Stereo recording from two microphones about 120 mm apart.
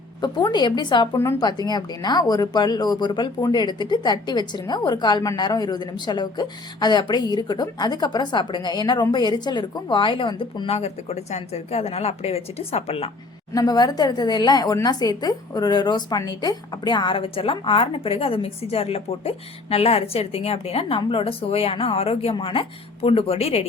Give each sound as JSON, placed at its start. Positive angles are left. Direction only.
{"t": 0.2, "sound": "speech", "side_deg": 35}
{"t": 1.1, "sound": "speech", "side_deg": 25}
{"t": 1.4, "sound": "speech", "side_deg": 35}
{"t": 10.7, "sound": "a woman's voice", "side_deg": 60}
{"t": 13.5, "sound": "a woman's voice", "side_deg": 30}